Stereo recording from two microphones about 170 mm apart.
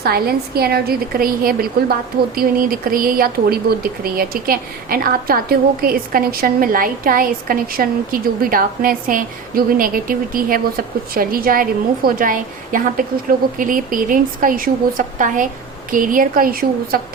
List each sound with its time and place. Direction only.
0.0 s a woman's voice: 65° right (ahead or behind)